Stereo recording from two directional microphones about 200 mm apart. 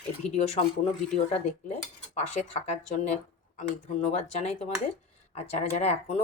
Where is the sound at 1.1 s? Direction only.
30° left (ahead or behind).